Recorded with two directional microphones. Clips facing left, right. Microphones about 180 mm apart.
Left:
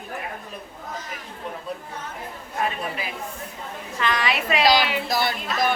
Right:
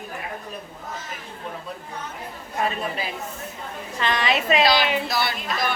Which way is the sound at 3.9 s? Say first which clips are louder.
Right 1 dB; 25° right (ahead or behind).